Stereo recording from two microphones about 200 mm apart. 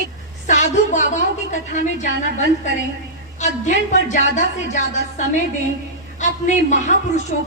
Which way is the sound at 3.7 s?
35° left (ahead or behind).